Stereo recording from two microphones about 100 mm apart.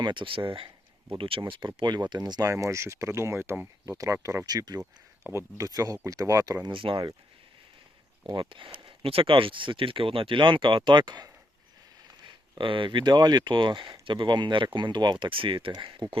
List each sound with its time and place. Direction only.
0.0 s speech: 55° right (ahead or behind)
2.5 s speech: 30° right (ahead or behind)
3.8 s speech: 35° right (ahead or behind)
5.2 s speech: 25° right (ahead or behind)
6.7 s speech: 60° right (ahead or behind)
8.4 s speech: 55° right (ahead or behind)
12.2 s speech: 55° right (ahead or behind)